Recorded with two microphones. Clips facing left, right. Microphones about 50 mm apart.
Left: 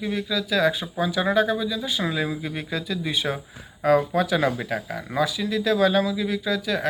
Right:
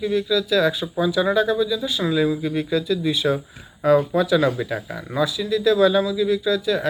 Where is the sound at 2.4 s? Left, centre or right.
Left.